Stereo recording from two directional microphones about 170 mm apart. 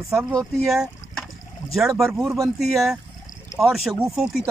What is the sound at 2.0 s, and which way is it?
Speech, 15° right (ahead or behind).